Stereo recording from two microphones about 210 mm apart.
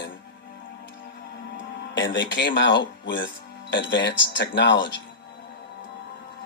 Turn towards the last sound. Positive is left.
turn(degrees=55)  # may be behind; listen again after turning